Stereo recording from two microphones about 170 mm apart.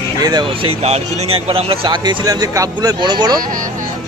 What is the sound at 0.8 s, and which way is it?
Speech, 40° right (ahead or behind).